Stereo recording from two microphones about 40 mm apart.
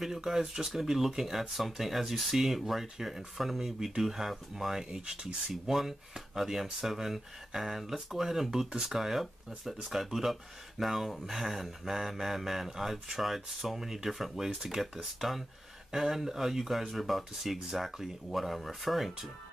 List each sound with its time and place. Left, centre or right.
0.0 s speech: centre
5.7 s speech: centre